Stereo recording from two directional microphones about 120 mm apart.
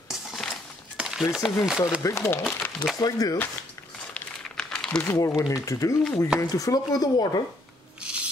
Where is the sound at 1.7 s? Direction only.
5° right (ahead or behind).